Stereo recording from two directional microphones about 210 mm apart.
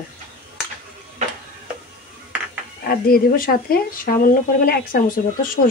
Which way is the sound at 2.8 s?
45° left (ahead or behind).